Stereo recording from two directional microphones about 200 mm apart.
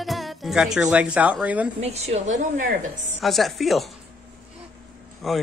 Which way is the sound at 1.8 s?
30° right (ahead or behind).